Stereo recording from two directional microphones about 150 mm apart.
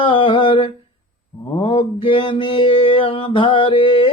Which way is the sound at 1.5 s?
35° left (ahead or behind).